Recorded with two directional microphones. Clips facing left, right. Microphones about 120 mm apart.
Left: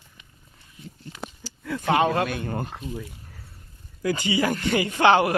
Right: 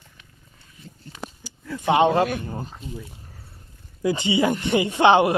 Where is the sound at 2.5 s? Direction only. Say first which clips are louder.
Left 3 dB; 70° left (ahead or behind).